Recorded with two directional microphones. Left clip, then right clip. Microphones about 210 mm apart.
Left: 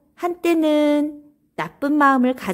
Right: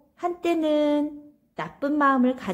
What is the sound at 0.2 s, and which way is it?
A woman's voice, 35° left (ahead or behind).